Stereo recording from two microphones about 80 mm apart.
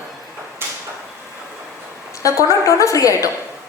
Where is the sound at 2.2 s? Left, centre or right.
Left.